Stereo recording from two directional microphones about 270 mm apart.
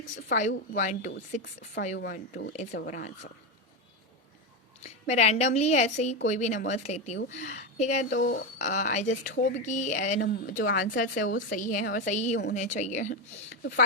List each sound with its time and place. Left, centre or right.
0.0 s speech: left
4.8 s speech: left